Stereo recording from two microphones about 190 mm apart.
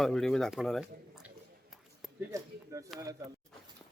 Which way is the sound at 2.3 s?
15° right (ahead or behind).